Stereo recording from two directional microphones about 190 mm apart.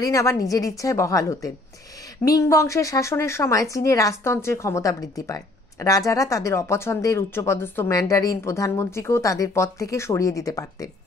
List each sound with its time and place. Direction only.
0.0 s speech: 15° left (ahead or behind)